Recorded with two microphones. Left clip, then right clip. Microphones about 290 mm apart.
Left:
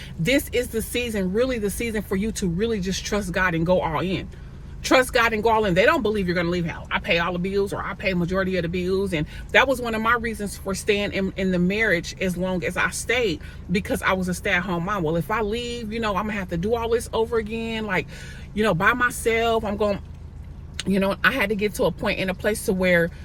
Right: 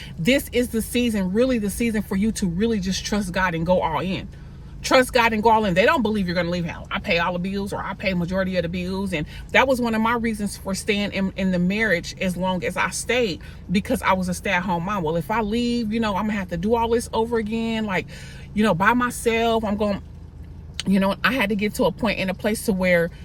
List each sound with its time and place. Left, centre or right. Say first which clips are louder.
0.2 s speech: right 1 dB; centre